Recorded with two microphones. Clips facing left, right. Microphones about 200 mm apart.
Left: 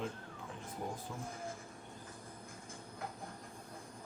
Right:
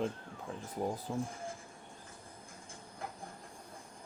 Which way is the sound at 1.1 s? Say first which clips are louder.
Right 9 dB; 35° right (ahead or behind).